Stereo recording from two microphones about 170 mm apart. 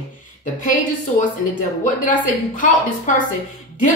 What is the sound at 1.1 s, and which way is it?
A woman's voice, 45° left (ahead or behind).